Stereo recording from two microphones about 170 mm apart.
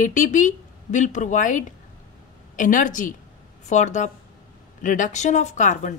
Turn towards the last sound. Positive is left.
turn(degrees=45)  # may be behind; listen again after turning